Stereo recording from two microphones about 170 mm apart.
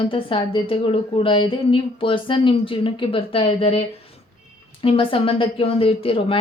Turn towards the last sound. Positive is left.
turn(degrees=35)  # may be behind; listen again after turning